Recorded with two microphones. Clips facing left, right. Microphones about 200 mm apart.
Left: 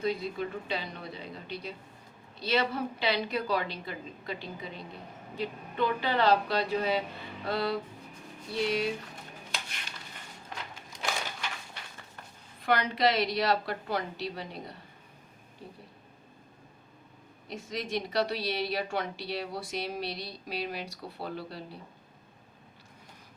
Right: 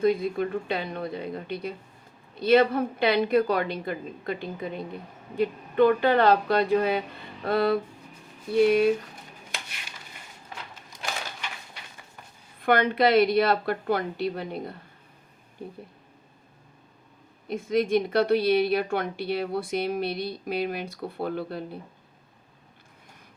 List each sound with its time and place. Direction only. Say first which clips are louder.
0.0 s a woman's voice: right 8 dB; 50° right (ahead or behind)
10.5 s a sound: even; 5° right (ahead or behind)
12.6 s a woman's voice: right 5 dB; 55° right (ahead or behind)
17.5 s a woman's voice: right 11 dB; 55° right (ahead or behind)